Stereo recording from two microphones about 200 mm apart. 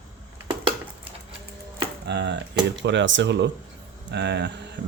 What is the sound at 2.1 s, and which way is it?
Speech, 60° right (ahead or behind).